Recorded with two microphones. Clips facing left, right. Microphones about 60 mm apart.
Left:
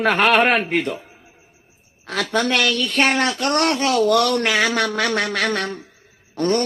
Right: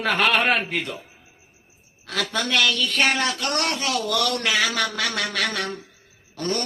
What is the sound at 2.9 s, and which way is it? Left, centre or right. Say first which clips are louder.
Speech: left 3 dB; centre.